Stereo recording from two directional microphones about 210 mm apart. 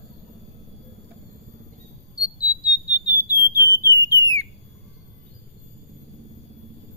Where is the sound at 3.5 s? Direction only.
15° right (ahead or behind).